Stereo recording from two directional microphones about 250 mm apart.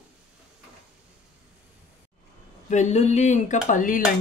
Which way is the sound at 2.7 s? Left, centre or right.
Left.